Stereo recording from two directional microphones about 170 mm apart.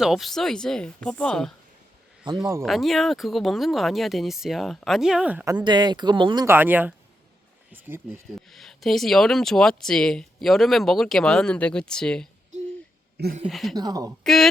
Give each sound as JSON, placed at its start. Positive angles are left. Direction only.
{"t": 0.0, "sound": "speech", "side_deg": 0}
{"t": 2.3, "sound": "speech", "side_deg": -25}
{"t": 2.6, "sound": "speech", "side_deg": 0}
{"t": 5.6, "sound": "speech", "side_deg": -25}
{"t": 6.4, "sound": "speech", "side_deg": -10}
{"t": 8.3, "sound": "speech", "side_deg": 0}
{"t": 13.4, "sound": "speech", "side_deg": 0}
{"t": 13.7, "sound": "speech", "side_deg": -20}